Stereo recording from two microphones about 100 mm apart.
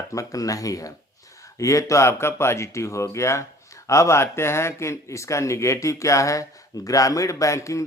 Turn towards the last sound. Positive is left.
turn(degrees=30)  # may be behind; listen again after turning